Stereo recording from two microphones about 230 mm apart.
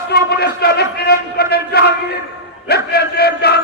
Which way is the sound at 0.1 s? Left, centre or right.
Left.